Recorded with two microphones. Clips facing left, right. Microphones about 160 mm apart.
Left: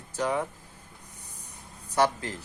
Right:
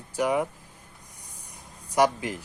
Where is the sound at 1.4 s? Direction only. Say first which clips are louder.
Right 1 dB; 10° right (ahead or behind).